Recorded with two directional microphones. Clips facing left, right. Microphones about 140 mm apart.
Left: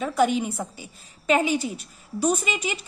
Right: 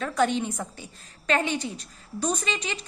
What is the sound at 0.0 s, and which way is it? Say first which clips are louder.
A woman's voice: left 3 dB; 5° left (ahead or behind).